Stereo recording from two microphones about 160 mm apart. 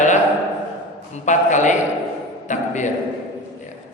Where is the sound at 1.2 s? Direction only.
50° left (ahead or behind).